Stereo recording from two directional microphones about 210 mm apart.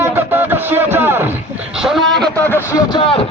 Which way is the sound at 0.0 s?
10° right (ahead or behind).